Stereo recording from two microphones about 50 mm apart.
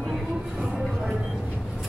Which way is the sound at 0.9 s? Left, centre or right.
Centre.